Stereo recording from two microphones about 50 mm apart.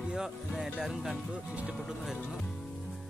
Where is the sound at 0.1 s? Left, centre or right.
Centre.